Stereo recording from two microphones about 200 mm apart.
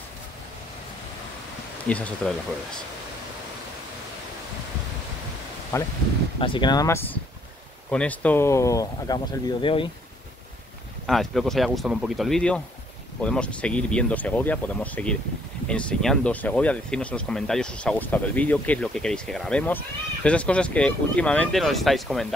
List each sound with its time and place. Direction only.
1.9 s speech: 5° left (ahead or behind)
5.7 s speech: 15° left (ahead or behind)
6.4 s speech: 25° left (ahead or behind)
11.1 s speech: centre (ahead or behind)